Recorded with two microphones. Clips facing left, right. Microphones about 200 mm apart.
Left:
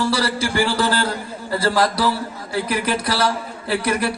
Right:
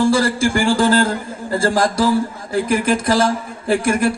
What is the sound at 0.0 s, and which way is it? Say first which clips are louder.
A man's voice: right 6 dB; 50° right (ahead or behind).